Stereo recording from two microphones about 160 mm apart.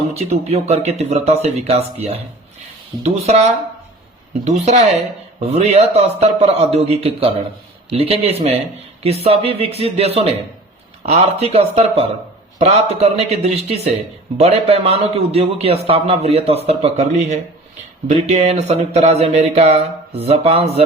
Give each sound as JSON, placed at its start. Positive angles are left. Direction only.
{"t": 0.1, "sound": "a man's voice", "side_deg": -40}